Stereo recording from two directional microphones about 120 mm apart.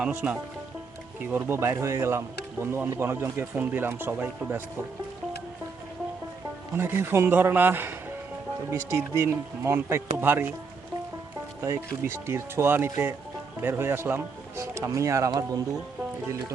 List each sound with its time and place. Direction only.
0.0 s speech: 15° right (ahead or behind)
6.7 s speech: 20° right (ahead or behind)
12.1 s speech: 20° right (ahead or behind)